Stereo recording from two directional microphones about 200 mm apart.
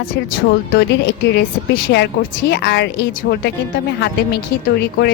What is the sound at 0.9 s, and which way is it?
A woman's voice, 60° left (ahead or behind).